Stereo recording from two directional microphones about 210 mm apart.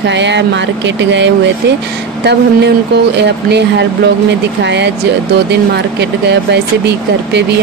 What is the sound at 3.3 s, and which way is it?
Speech, 55° right (ahead or behind).